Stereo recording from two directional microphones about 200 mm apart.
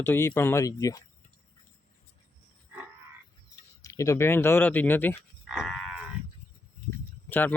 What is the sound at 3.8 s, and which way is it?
Speech, 15° left (ahead or behind).